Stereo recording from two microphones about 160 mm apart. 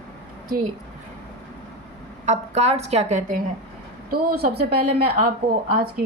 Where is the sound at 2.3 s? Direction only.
45° right (ahead or behind).